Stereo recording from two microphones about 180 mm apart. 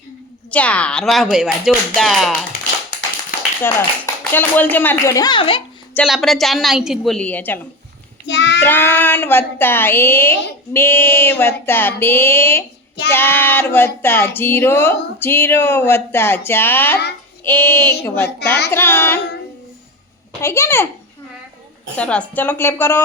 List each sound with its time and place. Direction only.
0.5 s speech: 5° left (ahead or behind)
3.6 s speech: 10° left (ahead or behind); by 5.6 s 30° left (ahead or behind)
6.1 s speech: centre (ahead or behind)
8.3 s child singing: 75° left (ahead or behind)
8.6 s speech: 10° left (ahead or behind)
20.4 s speech: 15° left (ahead or behind)
21.9 s speech: 5° left (ahead or behind)